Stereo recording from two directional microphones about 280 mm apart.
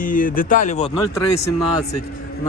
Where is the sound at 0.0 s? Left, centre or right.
Left; by 2.0 s centre.